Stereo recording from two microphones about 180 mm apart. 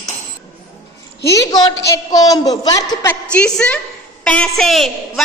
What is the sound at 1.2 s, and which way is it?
A woman's voice, 20° left (ahead or behind).